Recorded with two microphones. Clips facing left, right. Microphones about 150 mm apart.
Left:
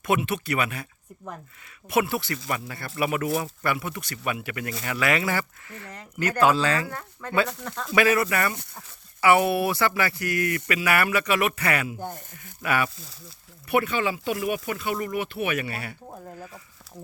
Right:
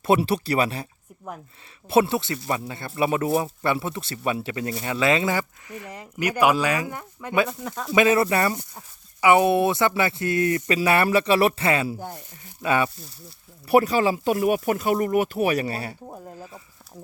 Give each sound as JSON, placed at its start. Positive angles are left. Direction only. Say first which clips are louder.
{"t": 0.0, "sound": "speech", "louder": "right 5 dB", "side_deg": -30}
{"t": 1.9, "sound": "speech", "louder": "right 4 dB", "side_deg": -25}
{"t": 7.9, "sound": "speech", "louder": "right 3 dB", "side_deg": -25}
{"t": 12.1, "sound": "speech", "louder": "right 1 dB", "side_deg": 50}
{"t": 12.6, "sound": "speech", "louder": "right 3 dB", "side_deg": -25}
{"t": 13.7, "sound": "speech", "louder": "right 5 dB", "side_deg": -35}
{"t": 16.0, "sound": "speech", "louder": "right 1 dB", "side_deg": -15}